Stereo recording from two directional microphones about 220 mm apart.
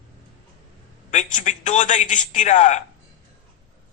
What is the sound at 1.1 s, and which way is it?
A man's voice, 35° left (ahead or behind).